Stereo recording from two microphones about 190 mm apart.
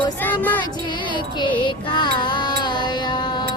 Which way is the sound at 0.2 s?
10° left (ahead or behind).